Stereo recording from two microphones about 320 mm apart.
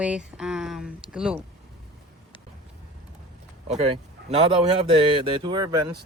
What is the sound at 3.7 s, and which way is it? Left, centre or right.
Speech, centre.